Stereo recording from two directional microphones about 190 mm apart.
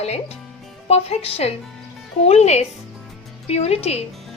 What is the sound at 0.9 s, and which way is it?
A woman's voice, 35° left (ahead or behind).